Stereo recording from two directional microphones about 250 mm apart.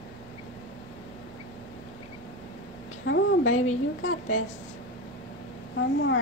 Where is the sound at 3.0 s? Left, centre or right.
Left.